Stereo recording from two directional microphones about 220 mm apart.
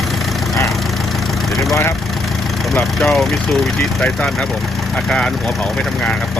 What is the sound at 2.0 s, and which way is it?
Speech, centre (ahead or behind).